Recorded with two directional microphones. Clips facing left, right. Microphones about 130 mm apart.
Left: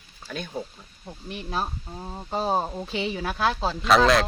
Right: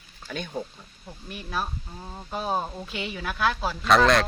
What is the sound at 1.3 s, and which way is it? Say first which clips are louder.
A woman's voice: left 2 dB; 25° left (ahead or behind).